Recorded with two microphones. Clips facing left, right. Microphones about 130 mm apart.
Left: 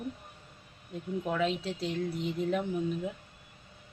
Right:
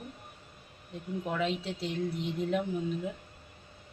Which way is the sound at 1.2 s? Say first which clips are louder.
Left 1 dB; centre (ahead or behind).